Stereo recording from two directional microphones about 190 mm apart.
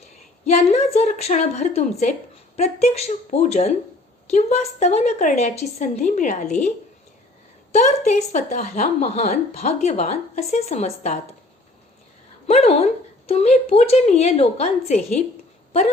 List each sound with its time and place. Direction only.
0.4 s a woman's voice: 35° left (ahead or behind)
12.5 s a woman's voice: 35° left (ahead or behind)